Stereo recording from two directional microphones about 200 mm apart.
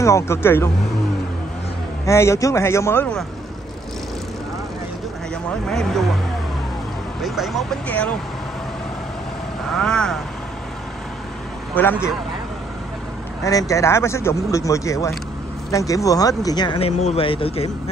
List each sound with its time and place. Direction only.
0.0 s speech: 15° left (ahead or behind)
2.0 s speech: 15° left (ahead or behind)
5.7 s speech: centre (ahead or behind)
7.2 s speech: centre (ahead or behind)
9.8 s speech: 5° left (ahead or behind)
11.7 s speech: 10° left (ahead or behind)
13.4 s speech: 15° left (ahead or behind)